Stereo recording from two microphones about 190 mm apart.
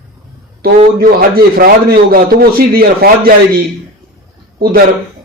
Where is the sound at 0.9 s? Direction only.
50° right (ahead or behind).